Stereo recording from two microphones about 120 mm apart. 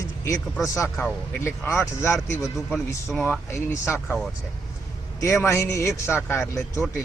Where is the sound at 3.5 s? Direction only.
20° left (ahead or behind).